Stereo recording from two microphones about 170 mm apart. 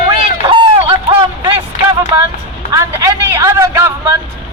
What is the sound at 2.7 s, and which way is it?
A man's voice, 20° right (ahead or behind).